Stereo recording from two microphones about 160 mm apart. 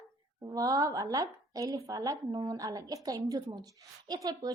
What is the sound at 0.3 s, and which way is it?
A woman's voice, 20° right (ahead or behind).